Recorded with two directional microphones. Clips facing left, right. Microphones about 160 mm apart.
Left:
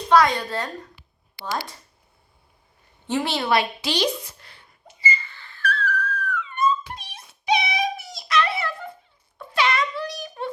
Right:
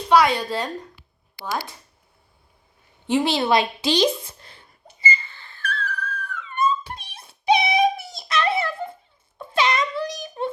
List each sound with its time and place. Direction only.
0.1 s a woman's voice: 10° right (ahead or behind)
3.1 s a woman's voice: 15° right (ahead or behind)
5.0 s a sound: 25° right (ahead or behind)